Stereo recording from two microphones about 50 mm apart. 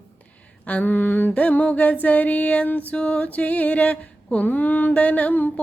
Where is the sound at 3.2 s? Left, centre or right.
Left.